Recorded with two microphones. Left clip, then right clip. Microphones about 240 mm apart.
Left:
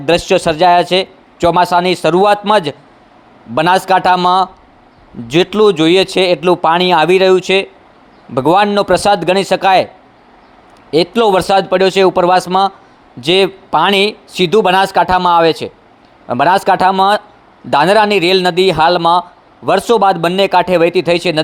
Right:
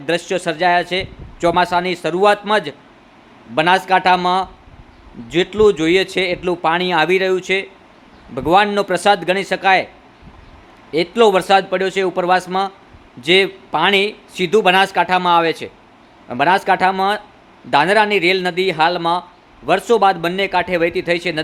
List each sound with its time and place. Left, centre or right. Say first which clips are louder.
0.0 s a man's voice: left 8 dB; left
10.9 s a man's voice: left 3 dB; left